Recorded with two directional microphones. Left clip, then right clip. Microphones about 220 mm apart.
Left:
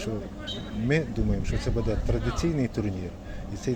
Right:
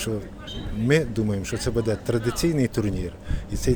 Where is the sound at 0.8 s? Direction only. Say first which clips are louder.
Right 6 dB; 50° right (ahead or behind).